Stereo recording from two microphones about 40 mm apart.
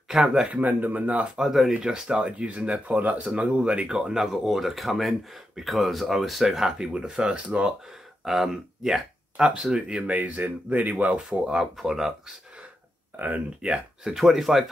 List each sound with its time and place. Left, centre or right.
0.2 s speech: centre
0.6 s speech: right
1.2 s speech: centre; by 3.0 s right
3.0 s speech: right
3.3 s speech: right
4.0 s speech: centre
6.9 s speech: centre
7.3 s speech: right
8.2 s speech: centre; by 10.0 s right
10.0 s speech: right
11.2 s speech: centre
11.6 s speech: centre
13.6 s speech: right
14.0 s speech: centre